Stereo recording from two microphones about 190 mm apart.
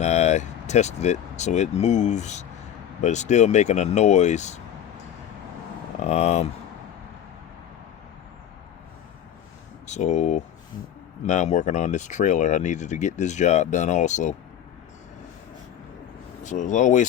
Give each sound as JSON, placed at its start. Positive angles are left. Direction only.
{"t": 0.0, "sound": "speech", "side_deg": 35}
{"t": 6.0, "sound": "speech", "side_deg": 35}
{"t": 9.8, "sound": "speech", "side_deg": 35}
{"t": 16.4, "sound": "speech", "side_deg": 40}